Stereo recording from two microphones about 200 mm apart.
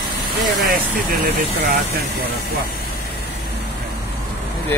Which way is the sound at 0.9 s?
50° right (ahead or behind).